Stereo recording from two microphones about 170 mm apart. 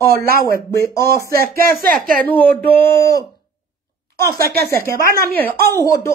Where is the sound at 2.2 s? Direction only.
10° left (ahead or behind).